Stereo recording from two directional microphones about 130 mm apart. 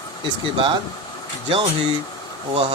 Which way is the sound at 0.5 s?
40° right (ahead or behind).